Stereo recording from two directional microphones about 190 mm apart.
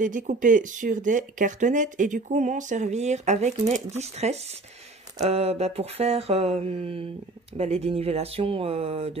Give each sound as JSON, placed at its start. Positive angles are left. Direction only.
{"t": 0.0, "sound": "speech", "side_deg": -45}